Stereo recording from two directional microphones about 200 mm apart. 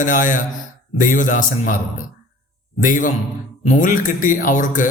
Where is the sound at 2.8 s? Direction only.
40° left (ahead or behind).